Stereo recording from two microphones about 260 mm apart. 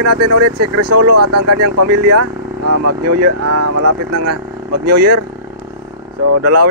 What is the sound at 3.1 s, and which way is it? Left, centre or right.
Speech, right.